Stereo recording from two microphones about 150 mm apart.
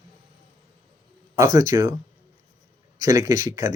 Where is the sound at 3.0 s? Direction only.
20° right (ahead or behind).